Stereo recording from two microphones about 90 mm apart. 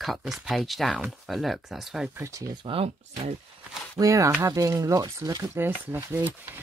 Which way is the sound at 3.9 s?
35° right (ahead or behind).